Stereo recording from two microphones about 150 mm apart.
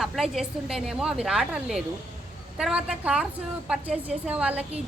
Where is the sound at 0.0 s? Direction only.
Centre (ahead or behind).